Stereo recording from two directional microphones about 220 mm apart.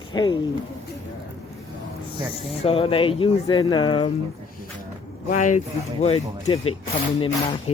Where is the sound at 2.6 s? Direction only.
25° left (ahead or behind).